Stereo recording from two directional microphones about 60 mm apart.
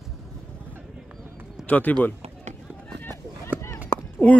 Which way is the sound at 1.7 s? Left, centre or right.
Left.